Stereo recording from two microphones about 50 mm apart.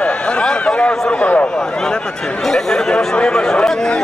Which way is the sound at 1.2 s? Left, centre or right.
Left.